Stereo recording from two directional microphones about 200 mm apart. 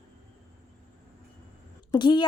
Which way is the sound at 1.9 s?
25° left (ahead or behind).